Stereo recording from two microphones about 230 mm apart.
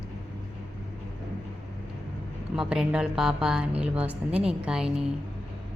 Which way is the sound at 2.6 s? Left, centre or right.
Centre.